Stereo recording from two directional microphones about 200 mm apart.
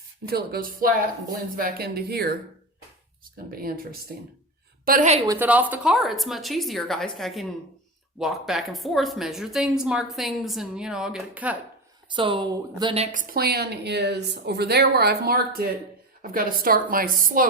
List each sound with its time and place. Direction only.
0.3 s a woman's voice: 50° right (ahead or behind)
4.9 s a woman's voice: 35° right (ahead or behind)
5.2 s a woman's voice: 15° right (ahead or behind)
12.0 s speech: 25° right (ahead or behind)
13.1 s a woman's voice: 40° right (ahead or behind)